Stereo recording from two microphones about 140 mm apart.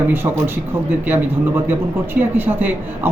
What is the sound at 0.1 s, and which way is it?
A man's voice, 15° right (ahead or behind).